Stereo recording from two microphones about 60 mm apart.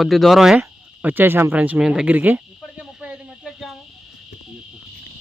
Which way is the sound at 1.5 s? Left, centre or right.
Right.